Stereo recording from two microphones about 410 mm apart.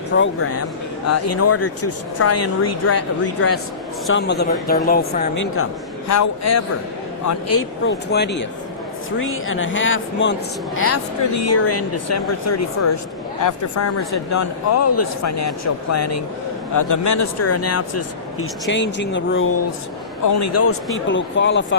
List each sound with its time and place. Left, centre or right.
0.2 s speech: left
6.1 s speech: left
18.7 s speech: left
20.2 s speech: left